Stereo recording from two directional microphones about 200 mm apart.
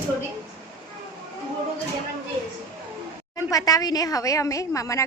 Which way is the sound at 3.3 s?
15° left (ahead or behind).